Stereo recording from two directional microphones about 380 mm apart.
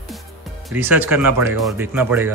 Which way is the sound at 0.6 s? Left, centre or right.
Centre.